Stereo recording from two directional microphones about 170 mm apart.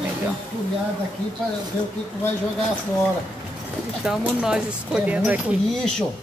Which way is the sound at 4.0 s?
5° right (ahead or behind).